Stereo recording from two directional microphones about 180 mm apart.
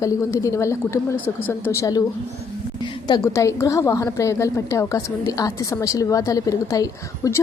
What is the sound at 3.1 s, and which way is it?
A woman's voice, 15° left (ahead or behind).